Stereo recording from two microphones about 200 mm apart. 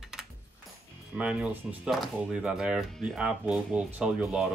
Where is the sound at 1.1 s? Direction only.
5° right (ahead or behind).